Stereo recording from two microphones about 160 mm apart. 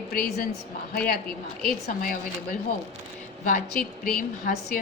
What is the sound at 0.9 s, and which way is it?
Speech, 80° left.